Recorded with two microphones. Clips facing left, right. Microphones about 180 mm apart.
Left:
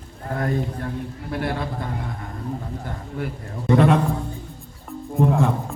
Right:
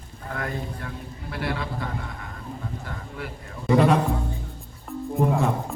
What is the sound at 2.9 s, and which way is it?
Speech, 45° left (ahead or behind).